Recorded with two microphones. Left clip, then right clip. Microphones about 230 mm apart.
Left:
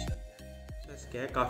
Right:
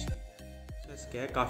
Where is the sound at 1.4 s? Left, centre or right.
Centre.